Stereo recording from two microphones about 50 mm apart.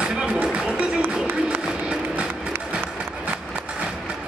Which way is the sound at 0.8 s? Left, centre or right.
Right.